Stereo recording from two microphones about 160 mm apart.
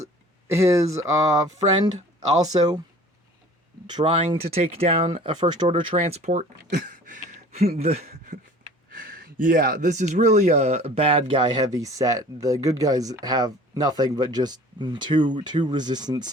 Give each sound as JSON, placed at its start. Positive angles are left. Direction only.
{"t": 0.0, "sound": "speech", "side_deg": -15}
{"t": 3.8, "sound": "speech", "side_deg": -30}
{"t": 8.9, "sound": "speech", "side_deg": -60}